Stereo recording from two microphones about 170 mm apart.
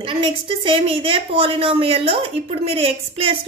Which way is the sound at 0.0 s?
30° right (ahead or behind).